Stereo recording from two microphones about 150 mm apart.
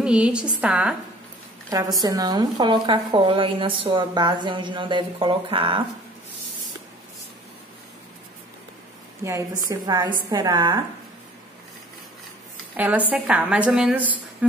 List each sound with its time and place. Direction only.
0.0 s a woman's voice: 5° right (ahead or behind)
1.7 s a woman's voice: 25° right (ahead or behind)
9.2 s a woman's voice: 20° right (ahead or behind)
12.7 s a woman's voice: 10° right (ahead or behind)